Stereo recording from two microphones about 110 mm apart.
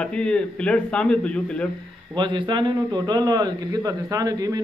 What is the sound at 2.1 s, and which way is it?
A man's voice, 45° right (ahead or behind).